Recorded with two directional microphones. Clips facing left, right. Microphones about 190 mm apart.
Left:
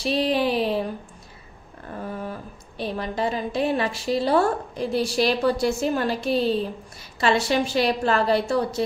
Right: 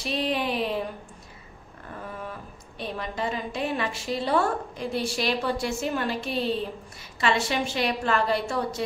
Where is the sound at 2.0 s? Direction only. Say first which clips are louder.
Left 5 dB; 35° left (ahead or behind).